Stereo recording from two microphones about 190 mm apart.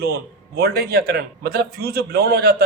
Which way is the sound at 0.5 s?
55° right (ahead or behind).